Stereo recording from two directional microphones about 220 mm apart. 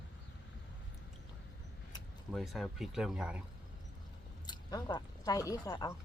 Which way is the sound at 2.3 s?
Centre (ahead or behind).